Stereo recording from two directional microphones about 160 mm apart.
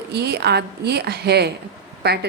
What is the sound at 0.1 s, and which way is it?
Speech, 90° right.